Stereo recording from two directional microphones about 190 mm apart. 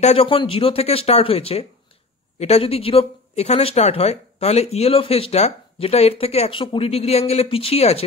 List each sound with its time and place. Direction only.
0.0 s speech: 30° left (ahead or behind)